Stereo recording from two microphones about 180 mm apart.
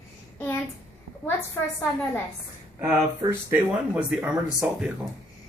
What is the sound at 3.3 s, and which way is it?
Speech, 10° right (ahead or behind).